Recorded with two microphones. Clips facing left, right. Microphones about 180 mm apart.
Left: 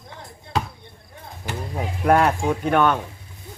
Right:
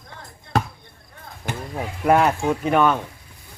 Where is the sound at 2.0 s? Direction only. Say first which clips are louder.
Even; 5° right (ahead or behind).